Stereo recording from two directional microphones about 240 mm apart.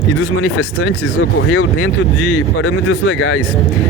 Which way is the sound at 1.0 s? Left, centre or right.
Left.